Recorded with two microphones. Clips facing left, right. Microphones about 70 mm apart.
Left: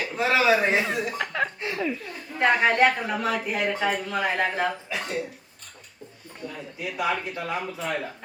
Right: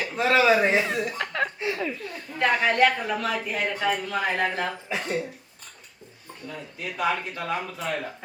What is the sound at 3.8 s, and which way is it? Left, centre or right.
Speech, centre.